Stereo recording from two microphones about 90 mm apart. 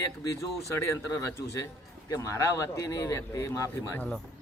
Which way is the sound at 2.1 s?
35° left (ahead or behind).